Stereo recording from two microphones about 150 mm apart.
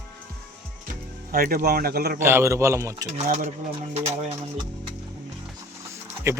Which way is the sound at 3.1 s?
50° right (ahead or behind).